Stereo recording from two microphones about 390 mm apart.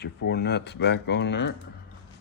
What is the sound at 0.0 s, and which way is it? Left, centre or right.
Speech, left.